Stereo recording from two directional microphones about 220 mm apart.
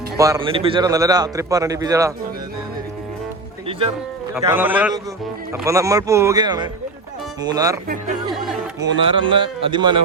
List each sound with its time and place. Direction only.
0.2 s a man's voice: 20° right (ahead or behind)
3.7 s speech: 25° right (ahead or behind)
4.4 s a man's voice: 10° right (ahead or behind)
9.0 s speech: 25° right (ahead or behind)